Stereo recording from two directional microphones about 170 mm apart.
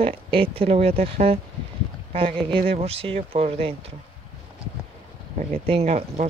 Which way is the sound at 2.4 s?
30° right (ahead or behind).